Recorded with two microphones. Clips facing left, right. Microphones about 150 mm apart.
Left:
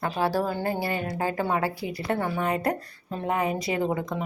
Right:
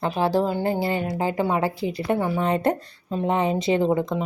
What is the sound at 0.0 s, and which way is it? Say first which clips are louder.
A woman's voice: right 4 dB; 25° right (ahead or behind).